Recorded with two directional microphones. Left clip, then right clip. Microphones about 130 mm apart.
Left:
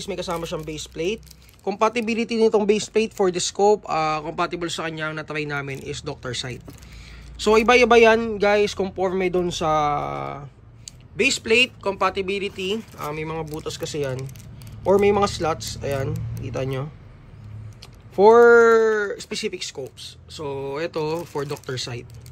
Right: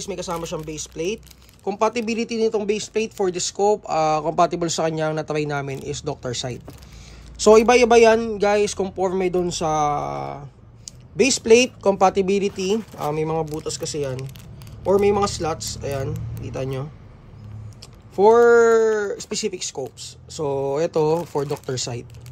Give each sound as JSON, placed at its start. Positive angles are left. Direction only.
{"t": 0.0, "sound": "speech", "side_deg": -15}
{"t": 3.9, "sound": "speech", "side_deg": -25}
{"t": 7.3, "sound": "a man's voice", "side_deg": -40}
{"t": 7.6, "sound": "speech", "side_deg": -20}
{"t": 11.1, "sound": "speech", "side_deg": -40}
{"t": 12.6, "sound": "speech", "side_deg": -30}
{"t": 13.6, "sound": "speech", "side_deg": -20}
{"t": 18.1, "sound": "speech", "side_deg": -5}